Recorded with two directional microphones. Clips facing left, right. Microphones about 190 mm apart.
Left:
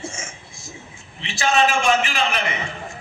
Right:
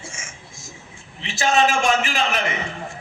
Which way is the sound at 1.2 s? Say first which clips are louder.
Even; 45° right (ahead or behind).